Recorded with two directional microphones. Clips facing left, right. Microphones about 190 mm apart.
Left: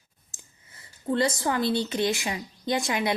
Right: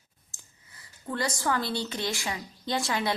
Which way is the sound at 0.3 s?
20° left (ahead or behind).